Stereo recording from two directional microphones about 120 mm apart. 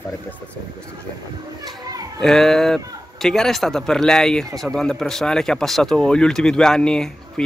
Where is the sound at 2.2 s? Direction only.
5° left (ahead or behind).